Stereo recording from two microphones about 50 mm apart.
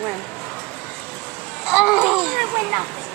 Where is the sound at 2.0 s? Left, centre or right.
Centre.